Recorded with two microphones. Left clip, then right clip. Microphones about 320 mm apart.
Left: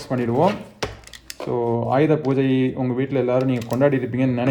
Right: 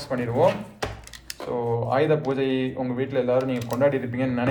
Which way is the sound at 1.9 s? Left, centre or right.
Left.